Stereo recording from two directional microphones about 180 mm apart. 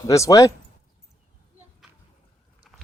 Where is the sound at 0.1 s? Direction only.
20° left (ahead or behind).